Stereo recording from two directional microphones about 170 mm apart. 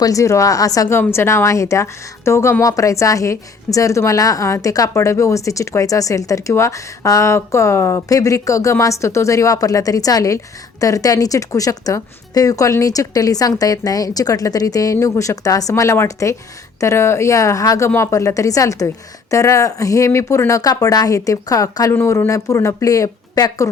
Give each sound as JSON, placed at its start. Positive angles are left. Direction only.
{"t": 0.0, "sound": "a woman's voice", "side_deg": 20}